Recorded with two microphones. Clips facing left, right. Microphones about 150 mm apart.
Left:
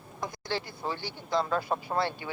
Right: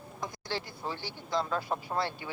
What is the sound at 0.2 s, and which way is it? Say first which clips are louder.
A man's voice: left 3 dB; 65° left (ahead or behind).